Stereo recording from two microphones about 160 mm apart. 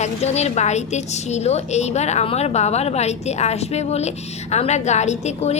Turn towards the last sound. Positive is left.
turn(degrees=45)  # may be behind; listen again after turning